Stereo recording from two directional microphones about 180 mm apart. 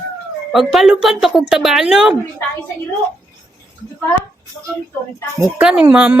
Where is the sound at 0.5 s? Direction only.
Centre (ahead or behind).